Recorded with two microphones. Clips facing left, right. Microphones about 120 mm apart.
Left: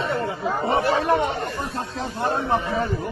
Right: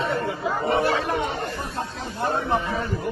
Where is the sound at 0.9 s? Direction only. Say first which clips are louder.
Left 5 dB; 45° left (ahead or behind).